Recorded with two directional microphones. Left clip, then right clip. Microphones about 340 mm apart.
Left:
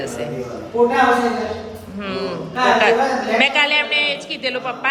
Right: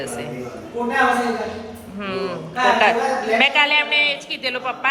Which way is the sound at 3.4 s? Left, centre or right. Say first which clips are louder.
Even; centre.